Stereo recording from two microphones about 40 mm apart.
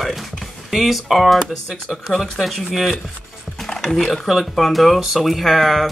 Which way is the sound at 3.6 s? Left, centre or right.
Centre.